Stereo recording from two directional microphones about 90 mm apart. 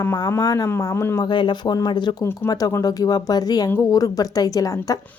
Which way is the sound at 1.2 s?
60° left (ahead or behind).